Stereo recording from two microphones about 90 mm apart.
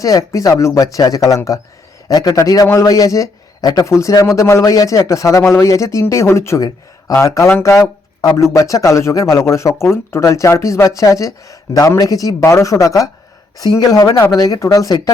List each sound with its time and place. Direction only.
0.0 s a man's voice: 40° left (ahead or behind)
3.8 s speech: 30° left (ahead or behind)
7.6 s a sound: 35° left (ahead or behind)
8.5 s speech: 35° left (ahead or behind)